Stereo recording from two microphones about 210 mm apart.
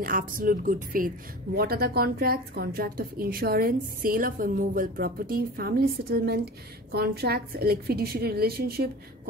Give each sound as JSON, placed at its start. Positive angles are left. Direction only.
{"t": 0.0, "sound": "a woman's voice", "side_deg": -40}